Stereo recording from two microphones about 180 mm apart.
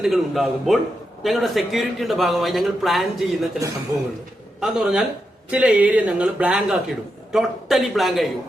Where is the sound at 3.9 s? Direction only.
15° right (ahead or behind).